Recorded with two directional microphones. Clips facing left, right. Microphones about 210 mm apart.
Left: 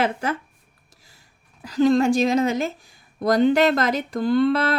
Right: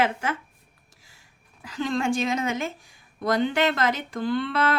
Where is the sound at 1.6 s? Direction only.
40° left (ahead or behind).